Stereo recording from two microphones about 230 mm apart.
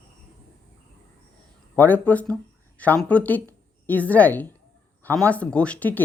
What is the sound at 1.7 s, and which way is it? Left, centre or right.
A woman's voice, centre.